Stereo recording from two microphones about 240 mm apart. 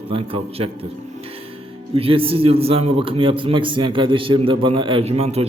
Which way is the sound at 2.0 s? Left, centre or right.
Right.